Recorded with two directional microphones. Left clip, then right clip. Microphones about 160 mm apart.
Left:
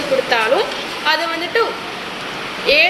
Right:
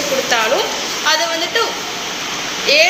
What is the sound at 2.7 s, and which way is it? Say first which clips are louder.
Speech: right 1 dB; 30° left (ahead or behind).